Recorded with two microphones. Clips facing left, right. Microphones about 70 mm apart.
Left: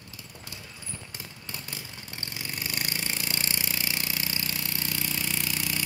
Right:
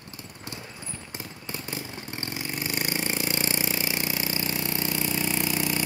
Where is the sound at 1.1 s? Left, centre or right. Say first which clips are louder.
Right 5 dB; right.